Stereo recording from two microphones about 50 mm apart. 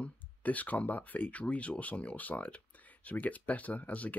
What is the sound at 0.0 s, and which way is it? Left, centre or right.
Speech, left.